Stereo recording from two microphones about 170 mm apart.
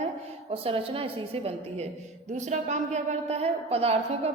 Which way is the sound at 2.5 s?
45° right (ahead or behind).